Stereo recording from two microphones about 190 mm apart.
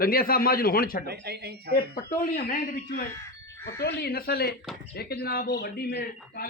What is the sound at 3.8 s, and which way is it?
A man's voice, 60° left (ahead or behind).